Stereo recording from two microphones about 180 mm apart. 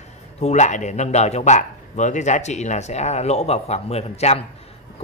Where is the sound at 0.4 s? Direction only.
40° left (ahead or behind).